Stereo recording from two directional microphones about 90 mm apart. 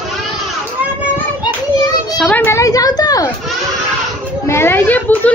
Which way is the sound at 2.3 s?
20° left (ahead or behind).